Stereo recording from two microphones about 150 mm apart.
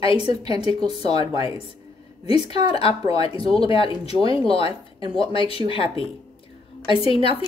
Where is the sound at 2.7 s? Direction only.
40° left (ahead or behind).